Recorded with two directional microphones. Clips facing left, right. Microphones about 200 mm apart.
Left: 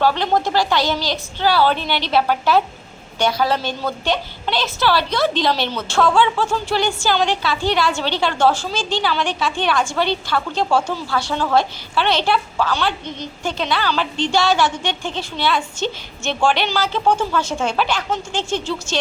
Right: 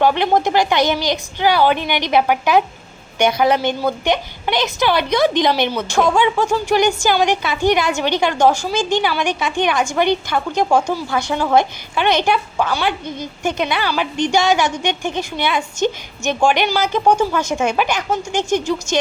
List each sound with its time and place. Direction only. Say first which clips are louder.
0.0 s a woman's voice: right 3 dB; 15° right (ahead or behind)